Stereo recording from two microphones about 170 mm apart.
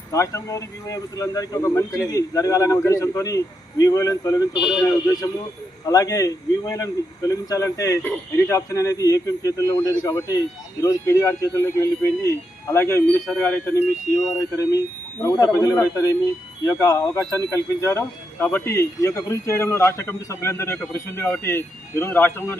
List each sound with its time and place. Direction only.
0.1 s speech: 20° left (ahead or behind)